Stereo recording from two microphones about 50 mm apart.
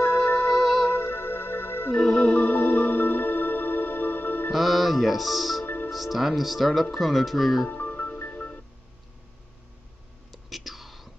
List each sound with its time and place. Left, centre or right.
0.0 s music: left
2.0 s music: centre
2.2 s music: left
4.5 s speech: centre
7.6 s music: left
10.3 s whispering: centre